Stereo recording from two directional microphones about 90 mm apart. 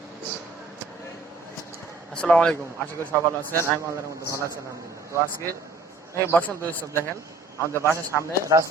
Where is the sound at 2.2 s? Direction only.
10° left (ahead or behind).